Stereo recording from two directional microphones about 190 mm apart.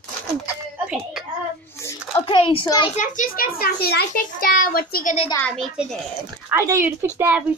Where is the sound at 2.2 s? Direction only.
30° left (ahead or behind).